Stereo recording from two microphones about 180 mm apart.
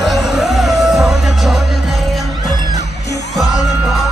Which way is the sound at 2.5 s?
20° right (ahead or behind).